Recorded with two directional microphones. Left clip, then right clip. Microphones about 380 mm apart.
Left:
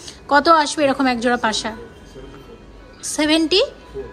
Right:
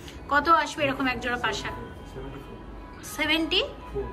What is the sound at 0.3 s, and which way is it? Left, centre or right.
A woman's voice, centre.